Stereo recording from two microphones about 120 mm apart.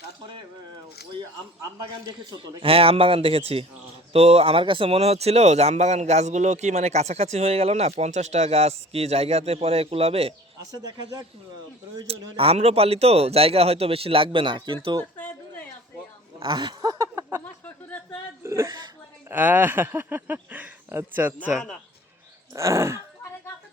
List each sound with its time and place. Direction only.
2.4 s speech: 50° right (ahead or behind)
12.0 s speech: 55° right (ahead or behind)
16.4 s speech: 35° right (ahead or behind)
17.4 s a sound: 15° left (ahead or behind)
18.4 s speech: 25° right (ahead or behind)
19.3 s speech: 15° right (ahead or behind)
22.5 s groan: 25° right (ahead or behind)